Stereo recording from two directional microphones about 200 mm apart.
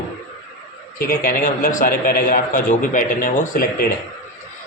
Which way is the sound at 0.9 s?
45° left (ahead or behind).